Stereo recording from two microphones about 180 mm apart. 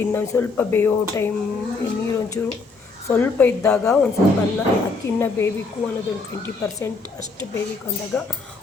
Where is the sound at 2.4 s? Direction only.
15° left (ahead or behind).